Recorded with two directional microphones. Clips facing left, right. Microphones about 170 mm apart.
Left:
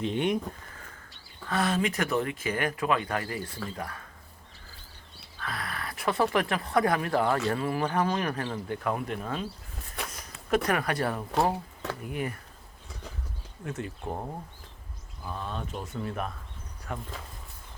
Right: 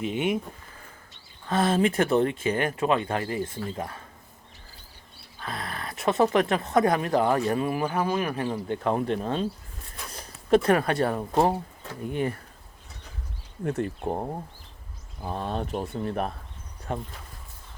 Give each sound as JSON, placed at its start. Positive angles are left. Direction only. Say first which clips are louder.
{"t": 0.0, "sound": "speech", "louder": "right 1 dB", "side_deg": -5}
{"t": 1.5, "sound": "speech", "louder": "right 5 dB", "side_deg": -25}
{"t": 5.4, "sound": "speech", "louder": "right 2 dB", "side_deg": -25}
{"t": 8.4, "sound": "speech", "louder": "right 4 dB", "side_deg": -25}
{"t": 10.5, "sound": "speech", "louder": "right 6 dB", "side_deg": -30}
{"t": 13.7, "sound": "speech", "louder": "right 7 dB", "side_deg": -35}
{"t": 15.2, "sound": "speech", "louder": "right 6 dB", "side_deg": -40}